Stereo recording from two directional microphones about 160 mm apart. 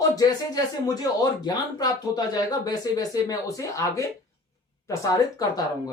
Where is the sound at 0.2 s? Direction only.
25° left (ahead or behind).